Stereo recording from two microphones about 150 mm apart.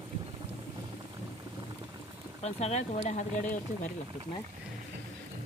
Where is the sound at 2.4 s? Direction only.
50° left (ahead or behind).